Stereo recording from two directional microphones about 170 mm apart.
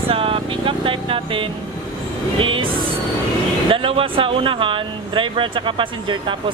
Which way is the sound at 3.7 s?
30° right (ahead or behind).